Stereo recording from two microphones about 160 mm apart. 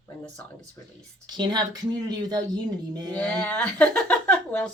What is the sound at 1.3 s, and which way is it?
Speech, 25° right (ahead or behind).